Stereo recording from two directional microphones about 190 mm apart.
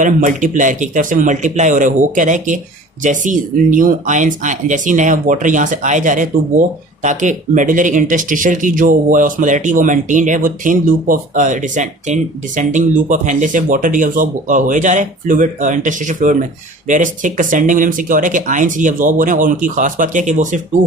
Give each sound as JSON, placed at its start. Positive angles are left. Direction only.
{"t": 0.0, "sound": "speech", "side_deg": -45}